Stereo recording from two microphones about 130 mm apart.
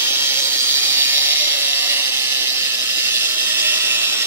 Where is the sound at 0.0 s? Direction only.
15° right (ahead or behind).